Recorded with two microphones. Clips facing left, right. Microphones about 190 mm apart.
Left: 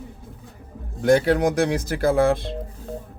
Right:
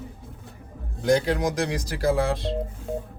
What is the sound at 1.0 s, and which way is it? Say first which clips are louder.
Speech: left 4 dB; 55° left (ahead or behind).